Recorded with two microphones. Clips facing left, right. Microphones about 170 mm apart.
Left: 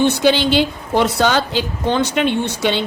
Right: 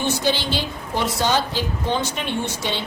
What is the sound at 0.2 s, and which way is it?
A woman's voice, 75° left (ahead or behind).